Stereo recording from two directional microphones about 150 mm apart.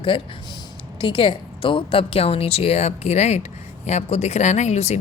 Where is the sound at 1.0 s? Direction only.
35° left (ahead or behind).